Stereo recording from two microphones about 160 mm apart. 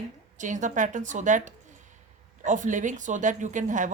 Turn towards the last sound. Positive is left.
turn(degrees=-50)  # may be behind; listen again after turning